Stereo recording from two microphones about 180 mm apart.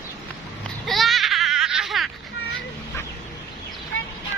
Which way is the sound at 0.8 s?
Centre (ahead or behind).